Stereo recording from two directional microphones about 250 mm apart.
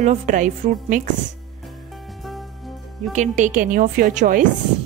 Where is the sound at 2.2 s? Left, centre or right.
Centre.